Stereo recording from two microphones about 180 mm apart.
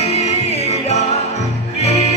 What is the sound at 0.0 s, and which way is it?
Music, 35° left (ahead or behind).